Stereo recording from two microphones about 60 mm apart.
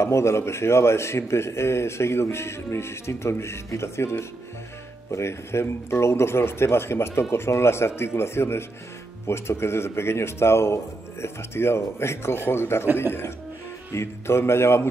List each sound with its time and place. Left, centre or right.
0.0 s speech: left